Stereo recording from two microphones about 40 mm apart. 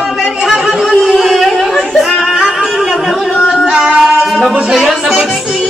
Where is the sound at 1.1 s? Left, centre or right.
Centre.